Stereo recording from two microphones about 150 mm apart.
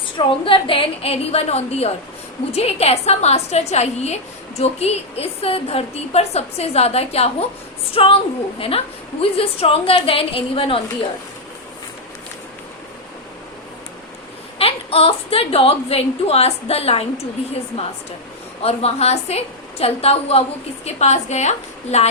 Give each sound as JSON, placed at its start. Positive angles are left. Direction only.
{"t": 0.2, "sound": "a woman's voice", "side_deg": 35}
{"t": 14.6, "sound": "a woman's voice", "side_deg": 40}
{"t": 18.6, "sound": "a woman's voice", "side_deg": 45}